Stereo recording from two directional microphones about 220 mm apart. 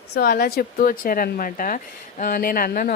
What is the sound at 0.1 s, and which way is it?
Speech, 45° left (ahead or behind).